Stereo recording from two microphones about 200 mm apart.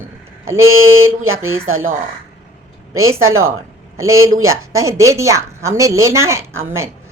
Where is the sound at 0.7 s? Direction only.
90° right.